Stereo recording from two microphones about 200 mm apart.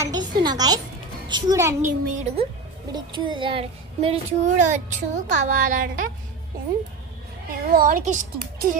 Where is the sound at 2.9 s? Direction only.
25° right (ahead or behind); by 6.1 s 40° right (ahead or behind).